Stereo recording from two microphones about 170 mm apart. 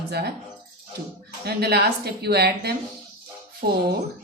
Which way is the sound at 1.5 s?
70° right (ahead or behind).